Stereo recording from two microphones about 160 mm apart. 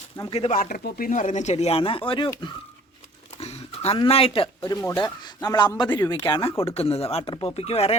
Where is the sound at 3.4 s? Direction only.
40° left (ahead or behind).